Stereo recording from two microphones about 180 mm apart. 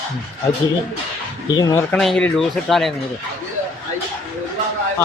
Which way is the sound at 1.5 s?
25° left (ahead or behind).